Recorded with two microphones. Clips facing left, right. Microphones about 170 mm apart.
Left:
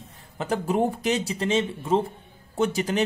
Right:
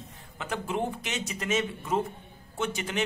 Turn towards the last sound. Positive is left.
turn(degrees=35)  # may be behind; listen again after turning